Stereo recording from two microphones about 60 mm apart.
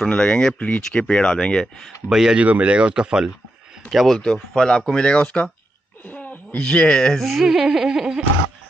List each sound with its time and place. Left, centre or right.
0.0 s speech: centre
2.0 s speech: centre
2.4 s speech: right
3.9 s speech: centre
4.2 s speech: centre
6.0 s a sound: left
6.6 s speech: centre
7.2 s speech: centre